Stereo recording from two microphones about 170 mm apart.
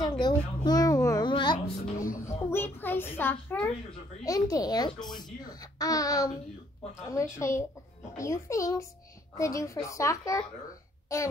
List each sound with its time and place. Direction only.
0.2 s babbling: 25° left (ahead or behind)
2.2 s a child's voice: 10° left (ahead or behind)
4.2 s a child's voice: 20° left (ahead or behind)